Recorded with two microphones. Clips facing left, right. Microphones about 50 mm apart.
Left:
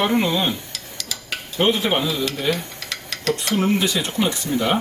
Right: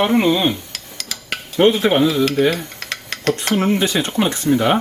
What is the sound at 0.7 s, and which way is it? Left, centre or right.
Dishes, right.